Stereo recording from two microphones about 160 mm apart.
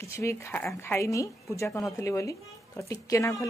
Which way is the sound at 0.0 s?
20° left (ahead or behind).